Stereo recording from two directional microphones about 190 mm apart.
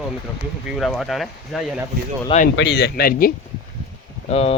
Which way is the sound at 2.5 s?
65° left (ahead or behind).